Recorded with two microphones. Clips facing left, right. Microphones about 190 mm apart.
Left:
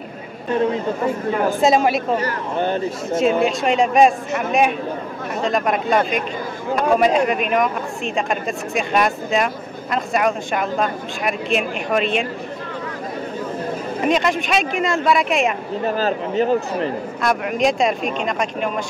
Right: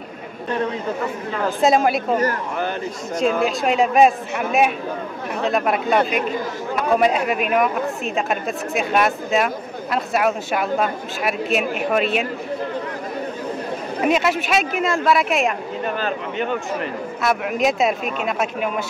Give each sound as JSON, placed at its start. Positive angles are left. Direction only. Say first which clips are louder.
{"t": 1.6, "sound": "speech", "louder": "right 1 dB", "side_deg": 0}
{"t": 2.5, "sound": "a man's voice", "louder": "left 4 dB", "side_deg": 30}
{"t": 3.2, "sound": "speech", "louder": "left 2 dB", "side_deg": 0}
{"t": 14.0, "sound": "speech", "louder": "even", "side_deg": -5}
{"t": 15.8, "sound": "speech", "louder": "left 5 dB", "side_deg": 35}
{"t": 17.2, "sound": "speech", "louder": "left 1 dB", "side_deg": -5}